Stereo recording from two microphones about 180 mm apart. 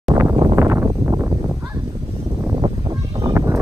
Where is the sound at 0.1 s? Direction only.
20° right (ahead or behind).